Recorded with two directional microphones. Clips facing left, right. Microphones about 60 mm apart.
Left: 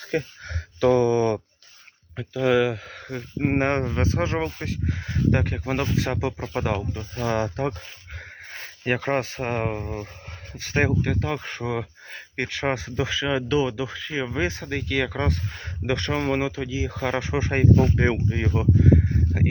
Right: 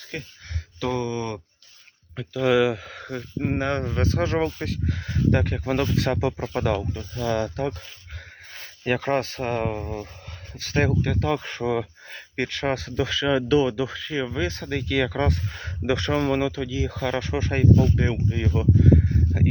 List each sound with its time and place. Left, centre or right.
0.1 s a sound: left
0.8 s speech: centre
3.3 s speech: left
3.8 s speech: centre
7.2 s speech: left
10.5 s speech: left
11.0 s speech: centre
12.6 s speech: centre
16.1 s speech: centre
17.7 s speech: left
18.8 s speech: centre